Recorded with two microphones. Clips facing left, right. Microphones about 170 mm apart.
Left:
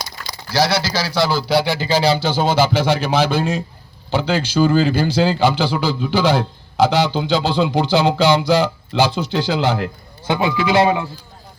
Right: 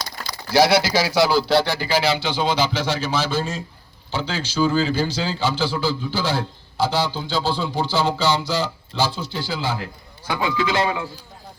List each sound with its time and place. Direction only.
0.5 s speech: 20° right (ahead or behind)
1.4 s speech: 5° left (ahead or behind)
1.6 s speech: 15° left (ahead or behind)
1.9 s speech: 35° left (ahead or behind)
2.8 s a man's voice: 60° left (ahead or behind)
5.5 s a sound: 60° left (ahead or behind)
10.2 s speech: 20° left (ahead or behind)